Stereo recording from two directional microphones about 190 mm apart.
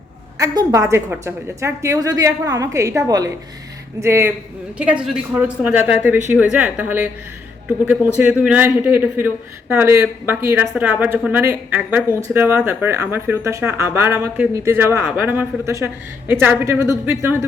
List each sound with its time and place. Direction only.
0.3 s a man's voice: 20° right (ahead or behind)